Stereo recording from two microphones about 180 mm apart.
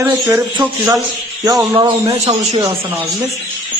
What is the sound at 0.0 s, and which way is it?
Speech, 10° right (ahead or behind).